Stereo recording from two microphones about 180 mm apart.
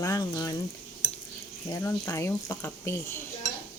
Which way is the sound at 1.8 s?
15° left (ahead or behind).